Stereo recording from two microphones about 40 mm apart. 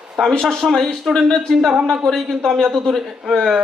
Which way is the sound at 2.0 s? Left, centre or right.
Centre.